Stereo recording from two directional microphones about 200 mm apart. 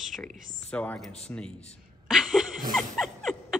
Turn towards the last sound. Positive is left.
turn(degrees=0)  # may be behind; listen again after turning